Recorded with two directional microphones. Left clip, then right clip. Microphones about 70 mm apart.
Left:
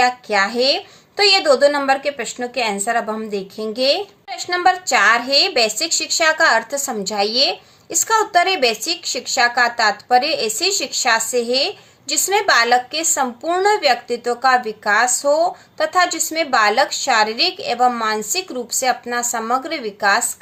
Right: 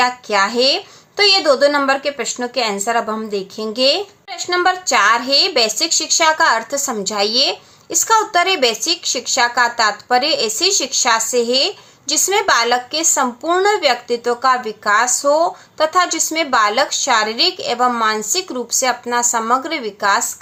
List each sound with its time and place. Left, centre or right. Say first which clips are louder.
0.0 s a woman's voice: right 1 dB; right